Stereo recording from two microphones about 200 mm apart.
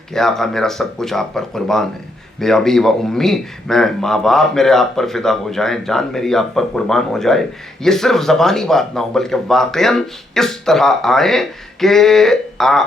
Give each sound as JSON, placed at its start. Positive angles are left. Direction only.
{"t": 0.1, "sound": "a man's voice", "side_deg": 0}